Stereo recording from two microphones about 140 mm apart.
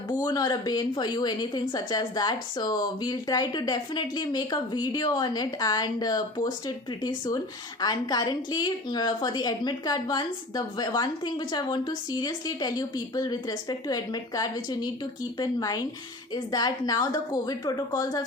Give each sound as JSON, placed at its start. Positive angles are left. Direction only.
{"t": 0.2, "sound": "a woman's voice", "side_deg": 30}